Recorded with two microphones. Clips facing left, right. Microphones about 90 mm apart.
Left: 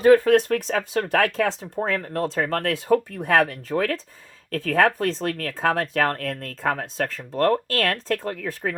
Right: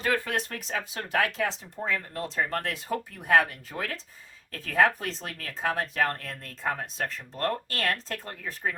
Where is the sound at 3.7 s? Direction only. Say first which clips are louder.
Left 11 dB; 70° left (ahead or behind).